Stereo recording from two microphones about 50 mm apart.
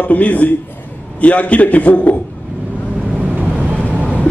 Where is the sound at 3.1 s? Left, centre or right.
Right.